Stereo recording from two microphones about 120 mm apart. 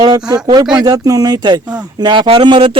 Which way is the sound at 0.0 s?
35° right (ahead or behind).